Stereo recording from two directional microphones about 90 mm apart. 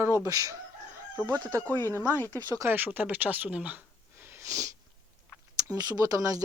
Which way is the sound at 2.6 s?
20° right (ahead or behind).